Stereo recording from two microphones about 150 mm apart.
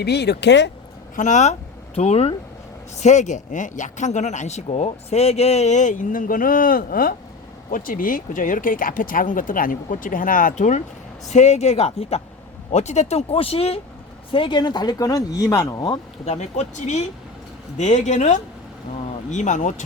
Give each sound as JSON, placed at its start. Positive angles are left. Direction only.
{"t": 0.0, "sound": "speech", "side_deg": 90}
{"t": 1.1, "sound": "speech", "side_deg": 55}
{"t": 16.2, "sound": "speech", "side_deg": 50}